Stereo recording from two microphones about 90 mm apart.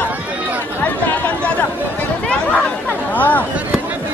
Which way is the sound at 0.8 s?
15° left (ahead or behind).